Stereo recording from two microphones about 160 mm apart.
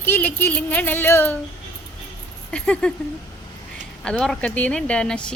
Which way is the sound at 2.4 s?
5° left (ahead or behind).